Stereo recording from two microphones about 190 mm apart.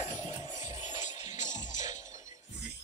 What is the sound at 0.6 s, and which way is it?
Music, 40° left (ahead or behind).